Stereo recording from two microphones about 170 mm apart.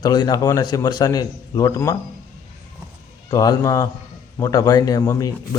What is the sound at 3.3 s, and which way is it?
Speech, 20° left (ahead or behind).